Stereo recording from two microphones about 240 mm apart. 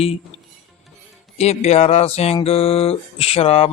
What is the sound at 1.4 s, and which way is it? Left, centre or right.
Mantra, left.